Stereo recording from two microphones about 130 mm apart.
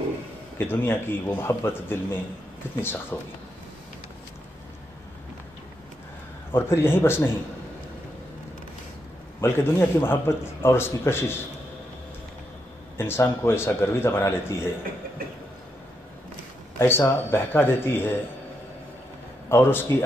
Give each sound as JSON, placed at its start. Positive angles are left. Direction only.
{"t": 0.6, "sound": "a man's voice", "side_deg": 15}
{"t": 6.5, "sound": "a man's voice", "side_deg": 15}
{"t": 9.4, "sound": "speech", "side_deg": 20}
{"t": 12.9, "sound": "speech", "side_deg": 20}
{"t": 16.7, "sound": "a man's voice", "side_deg": 20}
{"t": 19.5, "sound": "a man's voice", "side_deg": 15}